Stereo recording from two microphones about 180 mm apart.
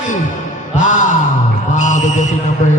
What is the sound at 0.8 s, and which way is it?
Music, 45° left (ahead or behind).